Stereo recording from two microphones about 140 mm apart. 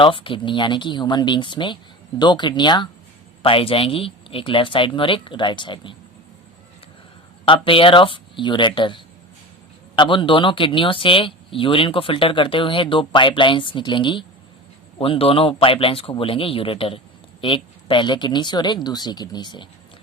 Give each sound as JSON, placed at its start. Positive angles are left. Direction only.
{"t": 0.0, "sound": "speech", "side_deg": 35}
{"t": 7.4, "sound": "speech", "side_deg": 35}